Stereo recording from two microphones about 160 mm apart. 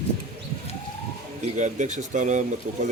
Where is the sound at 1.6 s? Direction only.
50° right (ahead or behind).